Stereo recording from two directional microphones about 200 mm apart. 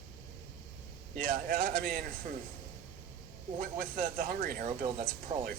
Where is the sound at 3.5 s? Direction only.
45° right (ahead or behind).